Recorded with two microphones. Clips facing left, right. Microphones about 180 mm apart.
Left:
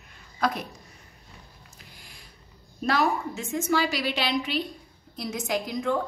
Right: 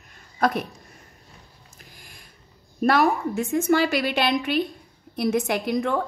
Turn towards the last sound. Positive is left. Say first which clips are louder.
# right 3 dB
turn(degrees=-65)  # may be behind; listen again after turning